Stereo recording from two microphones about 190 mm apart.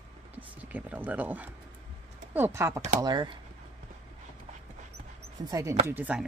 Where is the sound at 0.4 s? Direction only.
10° right (ahead or behind).